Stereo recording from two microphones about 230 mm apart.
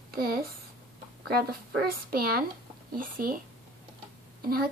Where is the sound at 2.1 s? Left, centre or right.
Right.